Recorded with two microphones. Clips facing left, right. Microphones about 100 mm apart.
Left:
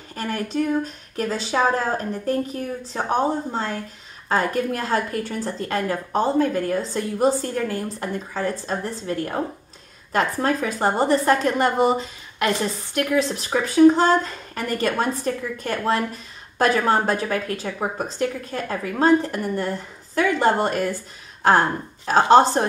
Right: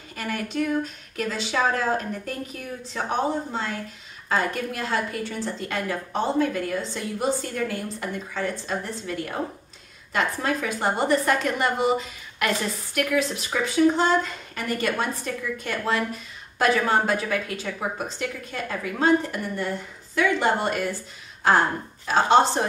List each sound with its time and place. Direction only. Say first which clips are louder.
0.1 s a woman's voice: left 3 dB; 35° left (ahead or behind)
4.3 s a woman's voice: left 4 dB; 40° left (ahead or behind)